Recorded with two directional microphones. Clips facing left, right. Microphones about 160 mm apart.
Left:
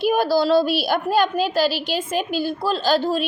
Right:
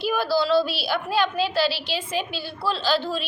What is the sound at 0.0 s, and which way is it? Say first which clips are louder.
A woman's voice: left 5 dB; 45° left (ahead or behind).